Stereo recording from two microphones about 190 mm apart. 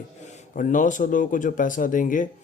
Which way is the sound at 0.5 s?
45° left (ahead or behind).